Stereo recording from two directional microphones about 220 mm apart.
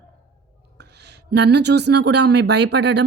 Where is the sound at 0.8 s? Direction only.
50° right (ahead or behind).